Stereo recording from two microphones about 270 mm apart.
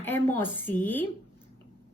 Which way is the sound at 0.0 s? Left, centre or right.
Centre.